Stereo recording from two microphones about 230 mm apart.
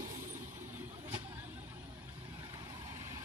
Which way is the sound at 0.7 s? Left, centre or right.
Centre.